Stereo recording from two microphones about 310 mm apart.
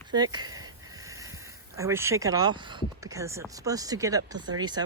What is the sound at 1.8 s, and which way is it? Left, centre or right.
Speech, centre.